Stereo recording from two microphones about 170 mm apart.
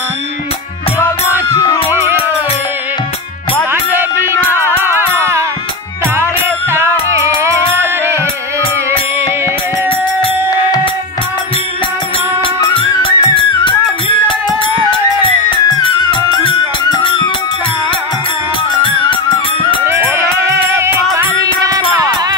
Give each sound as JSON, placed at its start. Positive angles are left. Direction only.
{"t": 1.5, "sound": "music", "side_deg": 20}
{"t": 3.7, "sound": "music", "side_deg": -15}
{"t": 6.7, "sound": "music", "side_deg": -15}
{"t": 9.8, "sound": "music", "side_deg": 30}
{"t": 12.5, "sound": "music", "side_deg": 25}
{"t": 15.7, "sound": "music", "side_deg": 25}
{"t": 18.8, "sound": "music", "side_deg": 30}
{"t": 19.8, "sound": "music", "side_deg": -15}